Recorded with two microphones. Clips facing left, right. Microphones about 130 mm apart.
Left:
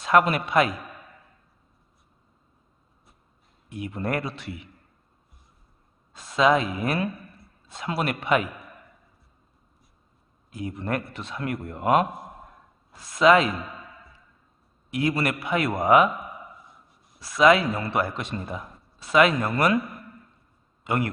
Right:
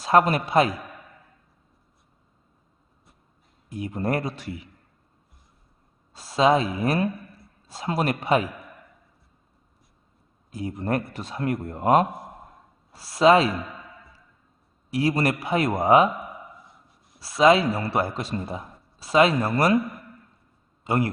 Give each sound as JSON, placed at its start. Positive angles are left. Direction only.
{"t": 0.0, "sound": "a man's voice", "side_deg": -35}
{"t": 3.7, "sound": "a man's voice", "side_deg": -35}
{"t": 6.1, "sound": "a man's voice", "side_deg": -35}
{"t": 10.5, "sound": "a man's voice", "side_deg": -35}
{"t": 14.8, "sound": "a man's voice", "side_deg": -35}
{"t": 17.2, "sound": "a man's voice", "side_deg": -30}
{"t": 20.8, "sound": "speech", "side_deg": -35}